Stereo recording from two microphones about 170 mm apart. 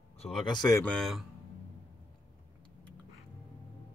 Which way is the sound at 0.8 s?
5° left (ahead or behind).